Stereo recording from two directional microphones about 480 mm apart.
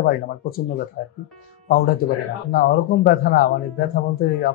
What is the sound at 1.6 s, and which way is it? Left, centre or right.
Speech, centre.